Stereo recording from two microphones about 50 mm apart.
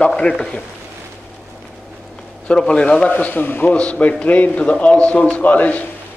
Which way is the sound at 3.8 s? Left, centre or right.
Left.